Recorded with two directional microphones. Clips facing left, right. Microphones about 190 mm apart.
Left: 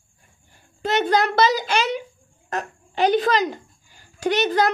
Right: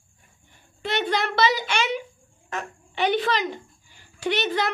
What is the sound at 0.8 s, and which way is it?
A child's voice, 40° left (ahead or behind).